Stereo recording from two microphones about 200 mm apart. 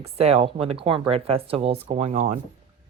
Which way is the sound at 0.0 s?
30° right (ahead or behind).